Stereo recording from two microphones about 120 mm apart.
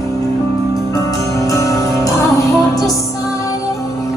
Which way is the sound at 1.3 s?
30° left (ahead or behind).